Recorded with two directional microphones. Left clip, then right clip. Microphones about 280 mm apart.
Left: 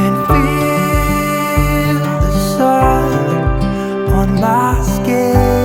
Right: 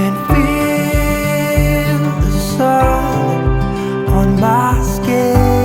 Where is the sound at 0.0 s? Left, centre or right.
Centre.